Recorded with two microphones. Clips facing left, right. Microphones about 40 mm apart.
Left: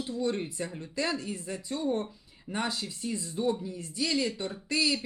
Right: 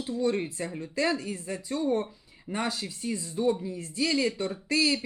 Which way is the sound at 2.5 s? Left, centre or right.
Right.